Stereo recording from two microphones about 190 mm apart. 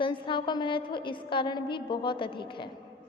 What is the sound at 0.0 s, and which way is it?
A woman's voice, 25° left (ahead or behind).